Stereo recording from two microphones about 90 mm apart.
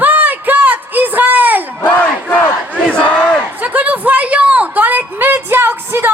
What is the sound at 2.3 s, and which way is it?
Battle cry, 10° left (ahead or behind).